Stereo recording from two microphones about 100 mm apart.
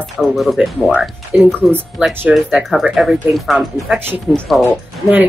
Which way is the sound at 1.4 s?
15° right (ahead or behind).